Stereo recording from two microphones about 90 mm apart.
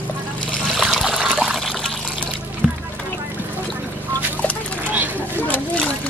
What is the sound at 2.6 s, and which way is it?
Rowboat, 5° right (ahead or behind).